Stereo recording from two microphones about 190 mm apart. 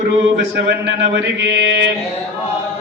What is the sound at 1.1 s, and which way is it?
Mantra, 65° right (ahead or behind).